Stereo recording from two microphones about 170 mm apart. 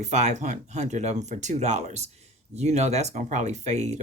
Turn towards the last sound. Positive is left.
turn(degrees=-40)  # may be behind; listen again after turning